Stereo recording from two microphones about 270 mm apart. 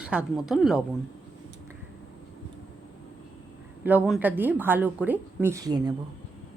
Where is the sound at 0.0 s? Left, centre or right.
Centre.